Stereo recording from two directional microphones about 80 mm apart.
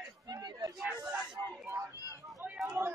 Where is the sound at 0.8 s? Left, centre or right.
Centre.